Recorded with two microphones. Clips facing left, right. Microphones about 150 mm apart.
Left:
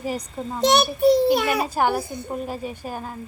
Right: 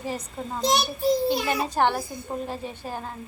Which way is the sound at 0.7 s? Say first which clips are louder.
Left 6 dB; 65° left (ahead or behind).